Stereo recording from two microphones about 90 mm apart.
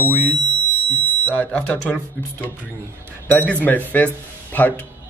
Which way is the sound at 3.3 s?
15° left (ahead or behind).